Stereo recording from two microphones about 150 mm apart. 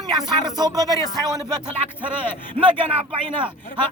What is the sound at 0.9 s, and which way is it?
Speech, 25° left (ahead or behind).